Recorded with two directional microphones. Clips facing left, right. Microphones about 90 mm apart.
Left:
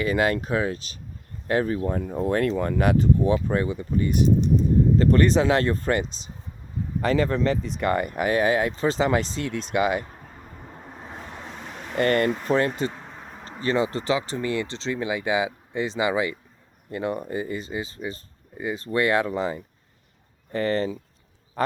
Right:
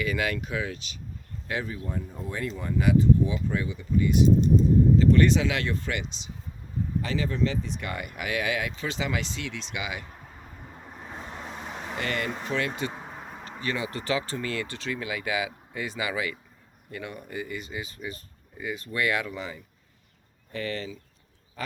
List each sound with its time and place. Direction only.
0.0 s speech: 35° left (ahead or behind)
10.8 s vehicle: 20° left (ahead or behind)
11.3 s vehicle: 10° right (ahead or behind)
11.9 s speech: 50° left (ahead or behind)
12.5 s speech: 40° left (ahead or behind)
12.9 s a sound: 10° right (ahead or behind)
13.6 s speech: 35° left (ahead or behind)